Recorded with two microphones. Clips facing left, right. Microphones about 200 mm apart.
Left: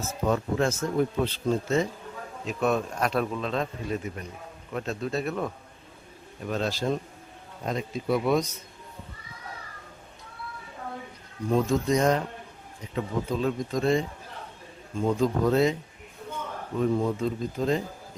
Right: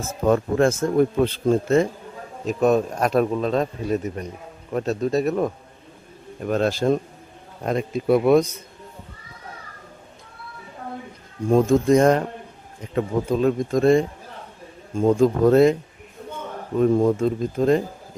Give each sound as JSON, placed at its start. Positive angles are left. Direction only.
{"t": 0.3, "sound": "a man's voice", "side_deg": -50}
{"t": 2.5, "sound": "speech", "side_deg": -40}
{"t": 6.4, "sound": "a man's voice", "side_deg": -55}
{"t": 11.4, "sound": "a man's voice", "side_deg": -50}
{"t": 16.7, "sound": "a man's voice", "side_deg": -45}